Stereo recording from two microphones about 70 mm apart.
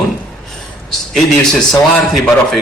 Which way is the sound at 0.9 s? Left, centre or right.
Centre.